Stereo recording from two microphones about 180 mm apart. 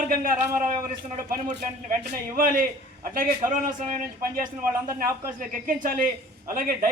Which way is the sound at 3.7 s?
50° right (ahead or behind).